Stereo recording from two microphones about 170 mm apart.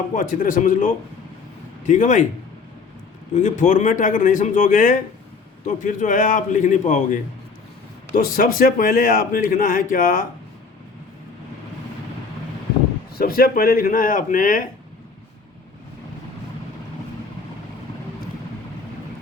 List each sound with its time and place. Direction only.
0.1 s speech: 50° left (ahead or behind)
3.3 s speech: 45° left (ahead or behind)
8.1 s a man's voice: 55° left (ahead or behind)
13.1 s a man's voice: 60° left (ahead or behind)